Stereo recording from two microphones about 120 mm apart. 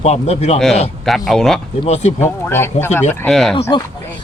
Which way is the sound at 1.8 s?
65° left (ahead or behind).